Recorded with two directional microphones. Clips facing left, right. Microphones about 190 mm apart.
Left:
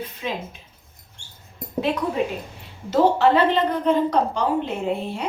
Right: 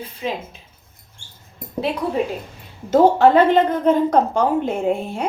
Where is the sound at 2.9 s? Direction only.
50° right (ahead or behind).